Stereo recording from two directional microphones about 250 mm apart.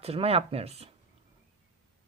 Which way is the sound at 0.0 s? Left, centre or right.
Right.